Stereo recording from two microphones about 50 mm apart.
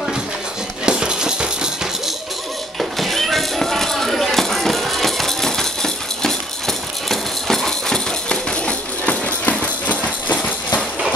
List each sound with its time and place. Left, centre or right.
0.8 s music: centre
2.8 s a sound: centre
7.1 s music: centre; by 10.4 s left